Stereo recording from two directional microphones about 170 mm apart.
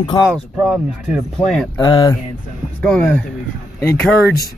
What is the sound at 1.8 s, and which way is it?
Speech, 25° left (ahead or behind).